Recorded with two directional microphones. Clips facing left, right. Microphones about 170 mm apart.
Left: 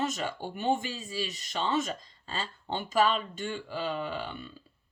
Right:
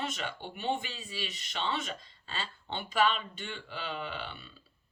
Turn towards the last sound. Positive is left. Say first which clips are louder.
# left 5 dB
turn(degrees=45)  # may be behind; listen again after turning